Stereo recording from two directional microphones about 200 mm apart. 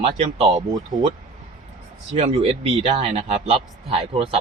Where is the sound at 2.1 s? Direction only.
30° right (ahead or behind).